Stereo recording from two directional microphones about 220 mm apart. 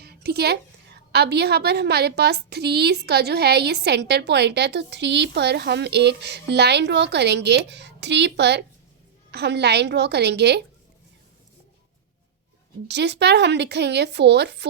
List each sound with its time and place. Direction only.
0.0 s a sound: 45° right (ahead or behind)
1.1 s a woman's voice: 50° right (ahead or behind)
12.9 s a woman's voice: 50° right (ahead or behind)